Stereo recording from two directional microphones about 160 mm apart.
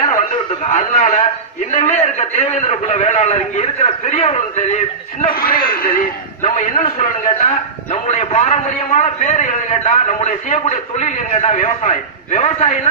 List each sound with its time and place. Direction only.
0.7 s a man's voice: 45° left (ahead or behind)
5.2 s a man's voice: 65° left (ahead or behind); by 7.1 s 50° left (ahead or behind)
7.3 s a man's voice: 35° left (ahead or behind)